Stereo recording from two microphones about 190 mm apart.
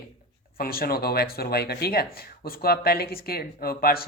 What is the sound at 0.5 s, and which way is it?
Speech, 50° left (ahead or behind).